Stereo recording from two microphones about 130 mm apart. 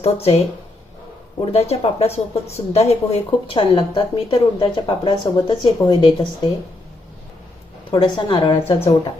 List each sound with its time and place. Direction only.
0.0 s a woman's voice: 50° left (ahead or behind); by 6.2 s 30° left (ahead or behind)
7.9 s a woman's voice: 35° left (ahead or behind)